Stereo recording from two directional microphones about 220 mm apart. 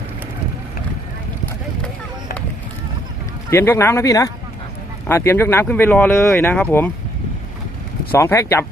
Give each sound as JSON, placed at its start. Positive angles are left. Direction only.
{"t": 3.5, "sound": "speech", "side_deg": 10}
{"t": 8.1, "sound": "speech", "side_deg": 10}